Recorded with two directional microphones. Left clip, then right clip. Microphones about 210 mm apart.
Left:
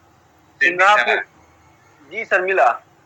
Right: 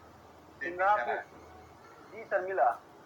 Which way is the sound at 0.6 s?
50° left (ahead or behind).